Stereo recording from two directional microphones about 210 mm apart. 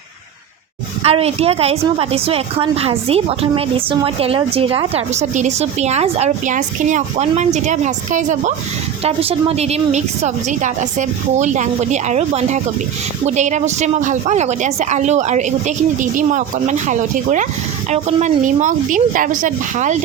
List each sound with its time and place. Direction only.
1.0 s a woman's voice: 30° right (ahead or behind)